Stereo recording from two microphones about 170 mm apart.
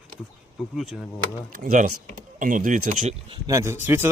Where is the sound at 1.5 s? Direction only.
60° right (ahead or behind).